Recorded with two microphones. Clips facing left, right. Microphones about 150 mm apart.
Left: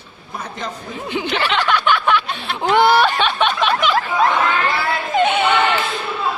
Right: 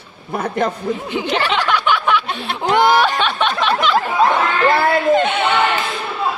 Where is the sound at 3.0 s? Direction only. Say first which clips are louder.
Even; centre (ahead or behind).